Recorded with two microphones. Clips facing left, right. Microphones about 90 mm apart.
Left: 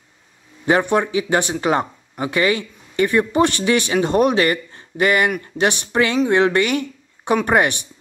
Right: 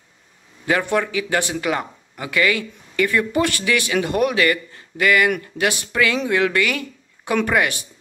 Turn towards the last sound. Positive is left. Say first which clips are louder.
# left 3 dB
turn(degrees=30)  # may be behind; listen again after turning